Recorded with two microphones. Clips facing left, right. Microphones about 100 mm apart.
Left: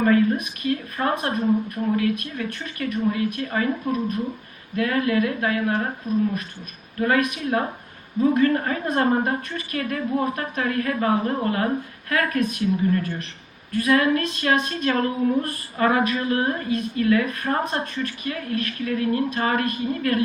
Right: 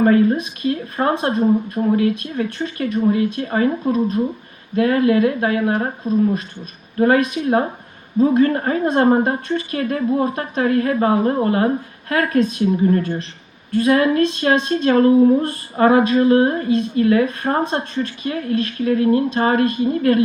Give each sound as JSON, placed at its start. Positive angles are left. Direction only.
{"t": 0.0, "sound": "a woman's voice", "side_deg": -30}